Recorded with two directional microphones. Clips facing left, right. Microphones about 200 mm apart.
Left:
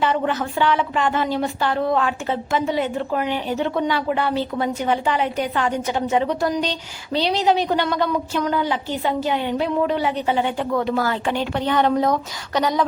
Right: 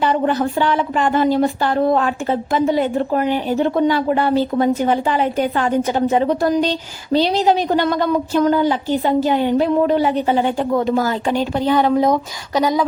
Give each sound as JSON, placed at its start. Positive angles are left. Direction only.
{"t": 0.0, "sound": "a woman's voice", "side_deg": -40}
{"t": 11.3, "sound": "speech", "side_deg": -10}